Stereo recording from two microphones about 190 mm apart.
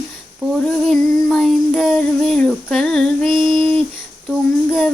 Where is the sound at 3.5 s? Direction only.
25° right (ahead or behind).